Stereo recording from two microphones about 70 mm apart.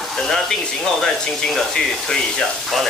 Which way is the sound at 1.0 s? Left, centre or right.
Centre.